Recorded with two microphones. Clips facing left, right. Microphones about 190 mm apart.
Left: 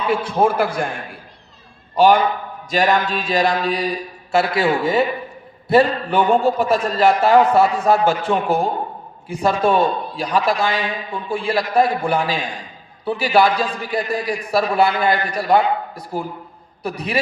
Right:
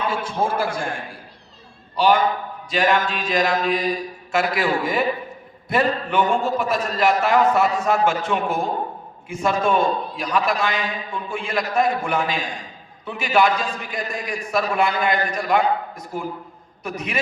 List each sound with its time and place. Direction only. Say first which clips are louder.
0.1 s a man's voice: left 6 dB; 60° left (ahead or behind)
2.0 s a man's voice: left 4 dB; 45° left (ahead or behind)